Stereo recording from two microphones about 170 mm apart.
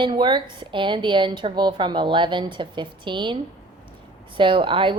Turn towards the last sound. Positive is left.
turn(degrees=-30)  # may be behind; listen again after turning